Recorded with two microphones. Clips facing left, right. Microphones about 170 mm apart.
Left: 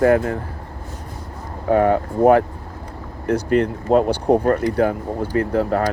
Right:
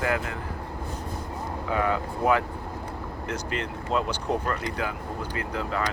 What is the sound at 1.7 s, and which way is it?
Speech, 50° left (ahead or behind).